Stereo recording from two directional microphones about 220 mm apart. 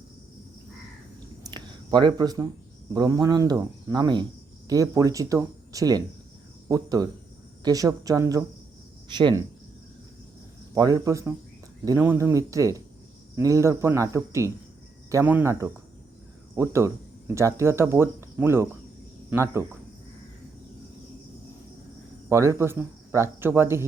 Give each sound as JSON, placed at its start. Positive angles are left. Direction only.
{"t": 1.5, "sound": "a sound", "side_deg": -20}
{"t": 2.9, "sound": "speech", "side_deg": -15}
{"t": 10.8, "sound": "speech", "side_deg": -15}
{"t": 22.3, "sound": "speech", "side_deg": -15}